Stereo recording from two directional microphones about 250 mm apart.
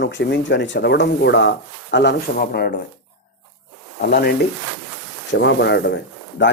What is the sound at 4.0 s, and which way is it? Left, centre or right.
Speech, left.